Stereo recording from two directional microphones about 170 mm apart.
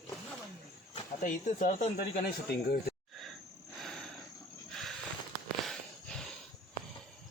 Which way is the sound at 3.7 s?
Centre (ahead or behind).